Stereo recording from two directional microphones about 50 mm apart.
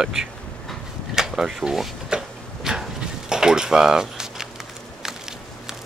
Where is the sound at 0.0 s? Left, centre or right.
Centre.